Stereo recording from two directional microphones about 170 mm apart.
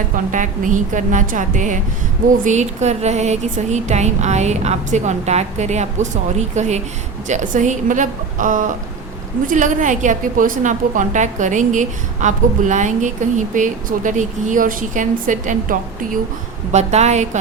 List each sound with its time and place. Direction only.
0.3 s a woman's voice: 50° right (ahead or behind)